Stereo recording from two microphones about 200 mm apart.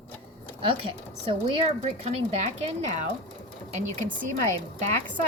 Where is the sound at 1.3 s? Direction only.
30° right (ahead or behind).